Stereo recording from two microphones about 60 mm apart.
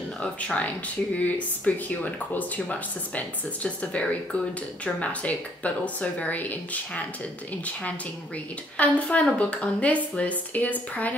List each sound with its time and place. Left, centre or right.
0.2 s speech: left
8.7 s speech: left